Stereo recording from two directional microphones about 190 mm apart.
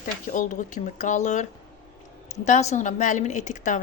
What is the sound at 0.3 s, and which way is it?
A woman's voice, 45° left (ahead or behind).